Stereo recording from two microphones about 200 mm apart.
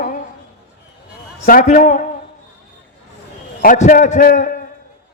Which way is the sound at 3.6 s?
40° left (ahead or behind).